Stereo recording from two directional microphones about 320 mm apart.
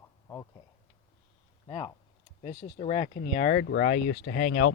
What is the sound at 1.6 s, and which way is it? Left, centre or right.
Speech, centre.